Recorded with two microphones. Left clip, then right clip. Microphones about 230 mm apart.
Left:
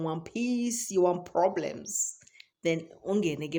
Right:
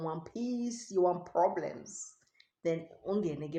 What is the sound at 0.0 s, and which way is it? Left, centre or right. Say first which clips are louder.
Speech: left 5 dB; left.